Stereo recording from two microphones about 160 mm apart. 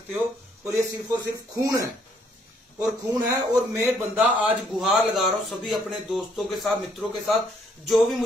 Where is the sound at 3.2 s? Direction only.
15° right (ahead or behind).